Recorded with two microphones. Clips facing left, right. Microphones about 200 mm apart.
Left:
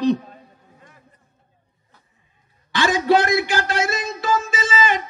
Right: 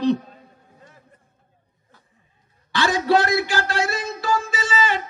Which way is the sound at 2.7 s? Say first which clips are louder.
Left 2 dB; 15° left (ahead or behind).